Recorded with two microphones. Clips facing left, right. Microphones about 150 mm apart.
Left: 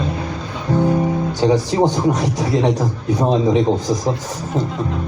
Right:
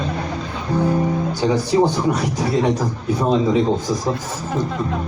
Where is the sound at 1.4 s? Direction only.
20° left (ahead or behind).